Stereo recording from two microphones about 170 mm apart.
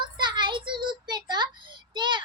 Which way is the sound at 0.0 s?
25° right (ahead or behind).